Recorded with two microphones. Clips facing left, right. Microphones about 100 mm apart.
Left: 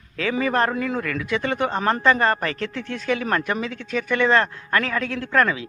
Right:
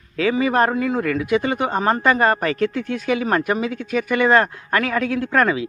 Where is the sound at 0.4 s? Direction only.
10° right (ahead or behind).